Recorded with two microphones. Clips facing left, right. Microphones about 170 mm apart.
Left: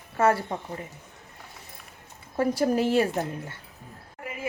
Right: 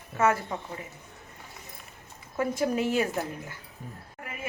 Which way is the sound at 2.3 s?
35° left (ahead or behind).